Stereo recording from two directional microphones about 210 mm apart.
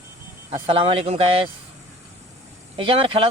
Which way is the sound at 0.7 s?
25° right (ahead or behind).